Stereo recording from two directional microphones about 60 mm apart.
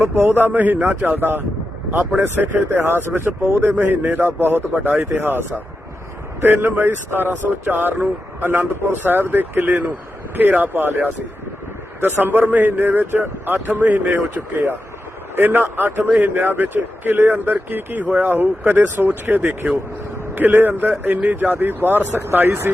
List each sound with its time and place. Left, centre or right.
0.0 s speech: right
1.0 s speech: right
4.7 s speech: right
4.9 s speech: right
15.4 s speech: right